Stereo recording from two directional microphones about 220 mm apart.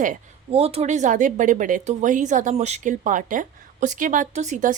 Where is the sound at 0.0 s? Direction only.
30° right (ahead or behind).